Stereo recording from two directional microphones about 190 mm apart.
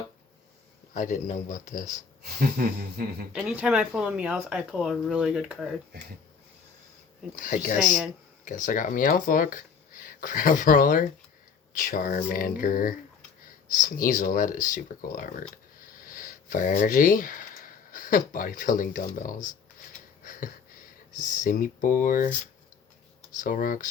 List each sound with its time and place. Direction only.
0.9 s speech: 40° left (ahead or behind)
2.2 s speech: 50° right (ahead or behind)
3.3 s speech: 5° right (ahead or behind)
7.3 s speech: 45° left (ahead or behind)
21.2 s speech: 45° left (ahead or behind)
23.3 s speech: 45° left (ahead or behind)